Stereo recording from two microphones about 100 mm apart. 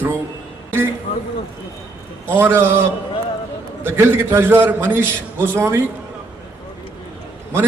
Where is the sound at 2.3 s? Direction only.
25° right (ahead or behind).